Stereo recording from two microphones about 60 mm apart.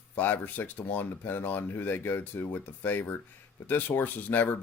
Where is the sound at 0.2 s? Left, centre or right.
Left.